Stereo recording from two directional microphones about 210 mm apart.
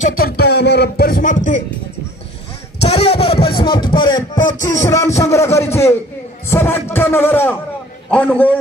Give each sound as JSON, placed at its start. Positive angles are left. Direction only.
{"t": 0.2, "sound": "speech", "side_deg": 50}
{"t": 2.8, "sound": "a sound", "side_deg": 30}
{"t": 4.6, "sound": "music", "side_deg": 15}